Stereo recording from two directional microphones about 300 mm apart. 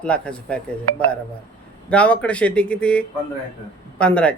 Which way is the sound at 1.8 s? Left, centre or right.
Centre.